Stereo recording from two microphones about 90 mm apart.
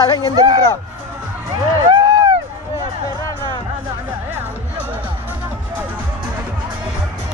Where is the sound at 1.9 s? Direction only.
55° right (ahead or behind).